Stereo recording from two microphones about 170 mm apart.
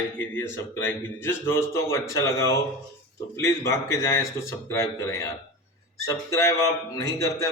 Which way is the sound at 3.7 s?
20° left (ahead or behind).